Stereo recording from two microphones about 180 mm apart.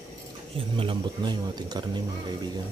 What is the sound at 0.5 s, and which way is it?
Speech, 30° right (ahead or behind).